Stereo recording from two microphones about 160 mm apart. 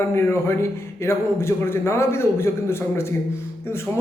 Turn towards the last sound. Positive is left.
turn(degrees=15)  # may be behind; listen again after turning